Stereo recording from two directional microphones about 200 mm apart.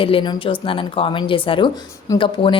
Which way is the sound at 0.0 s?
25° left (ahead or behind).